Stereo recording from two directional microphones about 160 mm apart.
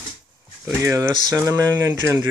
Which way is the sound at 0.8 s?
15° right (ahead or behind).